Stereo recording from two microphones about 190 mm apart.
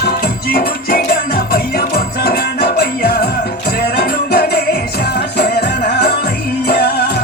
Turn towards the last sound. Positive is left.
turn(degrees=55)  # may be behind; listen again after turning